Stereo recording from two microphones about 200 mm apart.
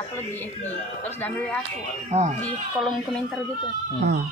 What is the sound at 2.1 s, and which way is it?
Speech, 30° right (ahead or behind).